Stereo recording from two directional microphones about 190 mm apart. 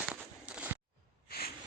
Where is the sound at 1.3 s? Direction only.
55° left (ahead or behind).